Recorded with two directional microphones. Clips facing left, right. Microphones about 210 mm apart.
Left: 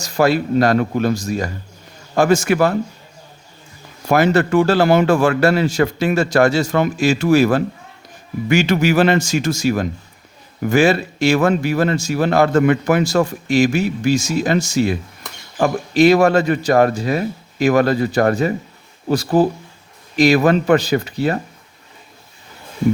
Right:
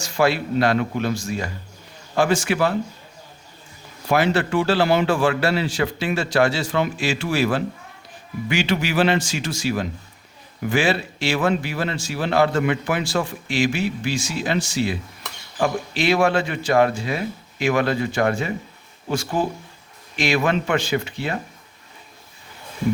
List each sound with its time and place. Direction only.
0.0 s a man's voice: 40° left (ahead or behind)
4.1 s a man's voice: 45° left (ahead or behind)